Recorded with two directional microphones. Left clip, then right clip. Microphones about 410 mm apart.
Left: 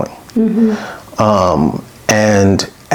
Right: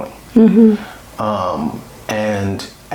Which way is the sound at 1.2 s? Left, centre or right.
Left.